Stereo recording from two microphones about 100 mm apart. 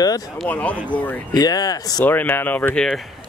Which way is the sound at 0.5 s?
15° left (ahead or behind).